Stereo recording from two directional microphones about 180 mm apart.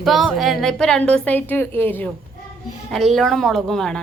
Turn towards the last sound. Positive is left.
turn(degrees=5)  # may be behind; listen again after turning